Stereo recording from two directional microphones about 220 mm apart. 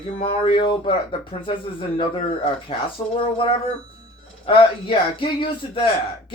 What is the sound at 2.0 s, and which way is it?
Speech, 25° left (ahead or behind).